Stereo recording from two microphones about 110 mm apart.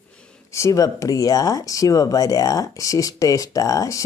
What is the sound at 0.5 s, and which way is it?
Speech, 30° left (ahead or behind).